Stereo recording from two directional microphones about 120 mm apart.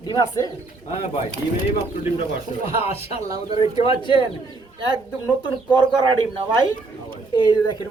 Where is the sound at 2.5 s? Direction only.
55° left (ahead or behind).